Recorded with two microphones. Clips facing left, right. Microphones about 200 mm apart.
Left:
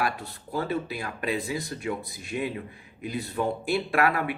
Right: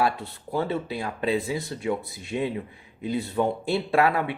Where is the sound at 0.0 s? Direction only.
25° right (ahead or behind).